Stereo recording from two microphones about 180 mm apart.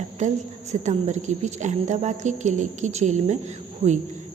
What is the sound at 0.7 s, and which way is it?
A woman's voice, 40° right (ahead or behind).